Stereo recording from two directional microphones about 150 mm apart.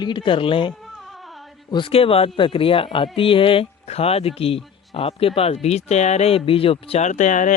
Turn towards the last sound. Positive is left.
turn(degrees=55)  # may be behind; listen again after turning